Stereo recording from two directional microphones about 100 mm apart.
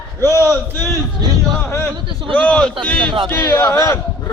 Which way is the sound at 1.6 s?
25° left (ahead or behind).